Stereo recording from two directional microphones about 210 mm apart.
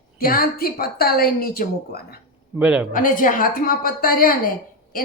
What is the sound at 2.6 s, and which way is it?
Speech, 5° right (ahead or behind).